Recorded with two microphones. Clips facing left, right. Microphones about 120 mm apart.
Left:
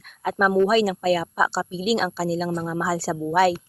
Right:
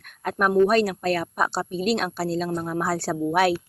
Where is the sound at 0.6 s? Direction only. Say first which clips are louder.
Right 1 dB; 5° left (ahead or behind).